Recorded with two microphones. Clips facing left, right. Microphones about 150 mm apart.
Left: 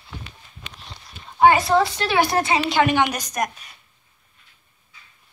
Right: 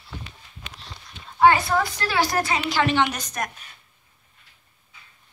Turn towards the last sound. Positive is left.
turn(degrees=15)  # may be behind; listen again after turning